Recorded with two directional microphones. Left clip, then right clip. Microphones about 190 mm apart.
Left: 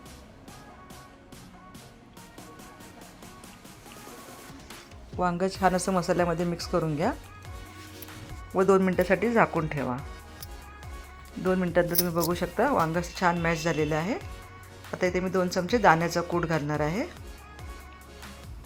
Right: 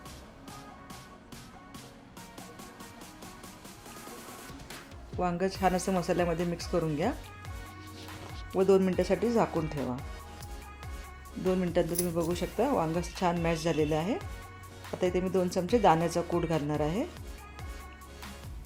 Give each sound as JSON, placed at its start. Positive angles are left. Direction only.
{"t": 5.1, "sound": "speech", "side_deg": 10}
{"t": 8.5, "sound": "speech", "side_deg": 10}
{"t": 9.3, "sound": "speech", "side_deg": 30}
{"t": 9.6, "sound": "speech", "side_deg": 0}
{"t": 11.4, "sound": "speech", "side_deg": 0}